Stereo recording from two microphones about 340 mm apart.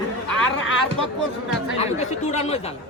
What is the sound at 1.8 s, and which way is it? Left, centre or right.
Speech, centre.